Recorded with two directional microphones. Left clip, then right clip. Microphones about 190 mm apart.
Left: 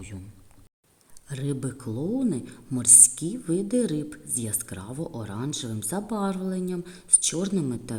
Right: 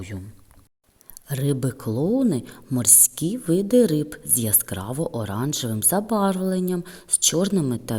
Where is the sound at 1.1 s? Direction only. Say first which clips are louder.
Right 7 dB; 35° right (ahead or behind).